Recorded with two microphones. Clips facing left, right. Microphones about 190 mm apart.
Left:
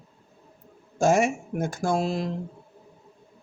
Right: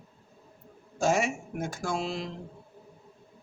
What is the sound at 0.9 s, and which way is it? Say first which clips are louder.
Speech: left 5 dB; 50° left (ahead or behind).